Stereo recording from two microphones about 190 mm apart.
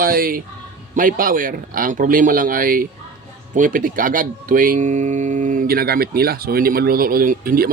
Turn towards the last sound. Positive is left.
turn(degrees=-50)  # may be behind; listen again after turning